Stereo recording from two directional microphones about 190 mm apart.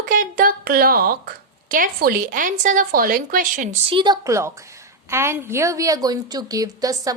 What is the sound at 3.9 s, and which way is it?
A woman's voice, 25° right (ahead or behind).